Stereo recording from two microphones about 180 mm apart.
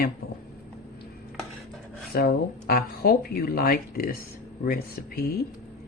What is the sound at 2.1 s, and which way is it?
Speech, 55° left (ahead or behind).